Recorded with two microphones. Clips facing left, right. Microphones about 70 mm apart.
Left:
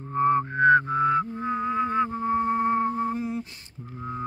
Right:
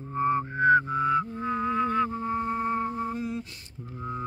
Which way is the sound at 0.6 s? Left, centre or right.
Left.